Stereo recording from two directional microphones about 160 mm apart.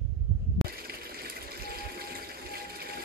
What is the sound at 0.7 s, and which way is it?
Water, 70° right (ahead or behind).